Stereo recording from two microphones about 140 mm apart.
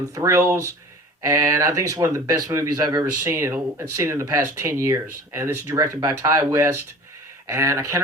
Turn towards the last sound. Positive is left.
turn(degrees=-20)  # may be behind; listen again after turning